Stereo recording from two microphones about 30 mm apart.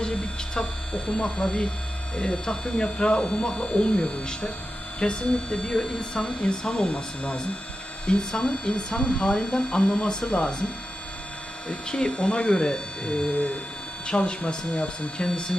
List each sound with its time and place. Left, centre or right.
1.1 s speech: left
8.0 s speech: left
11.7 s speech: left